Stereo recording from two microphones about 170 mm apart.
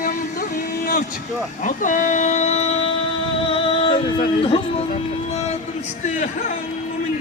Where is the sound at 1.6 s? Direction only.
50° left (ahead or behind).